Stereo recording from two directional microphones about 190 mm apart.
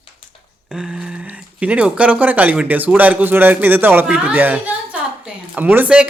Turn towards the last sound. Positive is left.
turn(degrees=-5)  # may be behind; listen again after turning